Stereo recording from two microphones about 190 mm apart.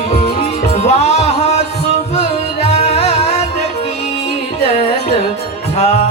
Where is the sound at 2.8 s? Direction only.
35° left (ahead or behind).